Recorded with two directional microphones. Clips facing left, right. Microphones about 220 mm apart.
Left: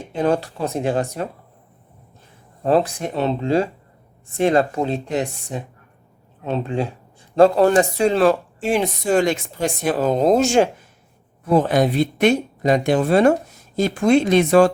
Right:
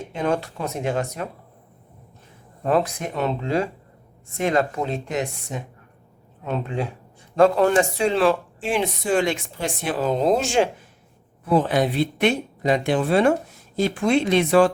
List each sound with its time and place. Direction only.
0.2 s speech: 35° left (ahead or behind)
2.6 s speech: 30° left (ahead or behind)